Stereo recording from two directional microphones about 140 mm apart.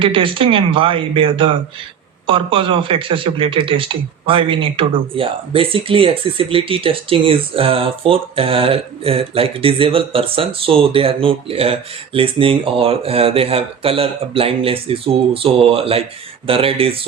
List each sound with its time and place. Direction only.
0.0 s a man's voice: 40° right (ahead or behind)